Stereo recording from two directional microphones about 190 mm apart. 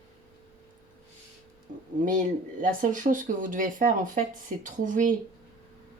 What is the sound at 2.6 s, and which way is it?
Speech, 45° right (ahead or behind).